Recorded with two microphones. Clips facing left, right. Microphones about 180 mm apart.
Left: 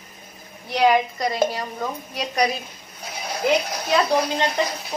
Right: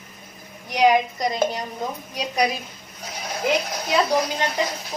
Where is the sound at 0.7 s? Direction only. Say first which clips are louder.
Even; 15° right (ahead or behind).